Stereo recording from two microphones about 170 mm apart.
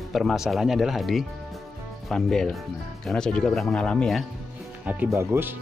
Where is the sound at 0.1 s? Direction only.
Centre (ahead or behind).